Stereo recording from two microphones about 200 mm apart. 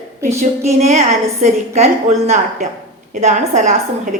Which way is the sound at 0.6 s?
35° right (ahead or behind).